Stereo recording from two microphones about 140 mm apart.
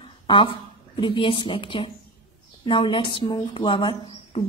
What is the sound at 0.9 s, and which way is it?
A woman's voice, 40° left (ahead or behind).